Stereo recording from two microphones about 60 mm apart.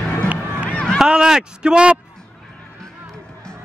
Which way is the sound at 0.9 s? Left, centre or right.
Centre.